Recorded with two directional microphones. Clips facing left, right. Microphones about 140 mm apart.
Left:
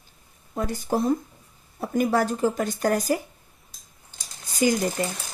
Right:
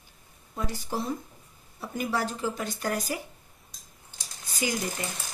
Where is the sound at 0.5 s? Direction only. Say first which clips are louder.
Left 7 dB; 50° left (ahead or behind).